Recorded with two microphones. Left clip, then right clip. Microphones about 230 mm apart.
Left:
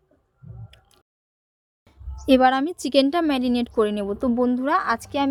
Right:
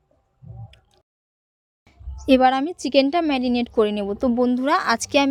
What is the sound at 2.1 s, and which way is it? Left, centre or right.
A woman's voice, centre.